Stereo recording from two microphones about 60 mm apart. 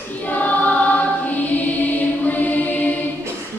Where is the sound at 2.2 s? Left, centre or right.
Left.